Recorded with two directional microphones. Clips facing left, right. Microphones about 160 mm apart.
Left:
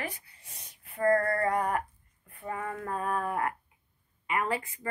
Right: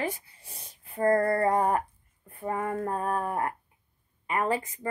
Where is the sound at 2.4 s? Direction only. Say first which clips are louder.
Right 6 dB; 45° right (ahead or behind).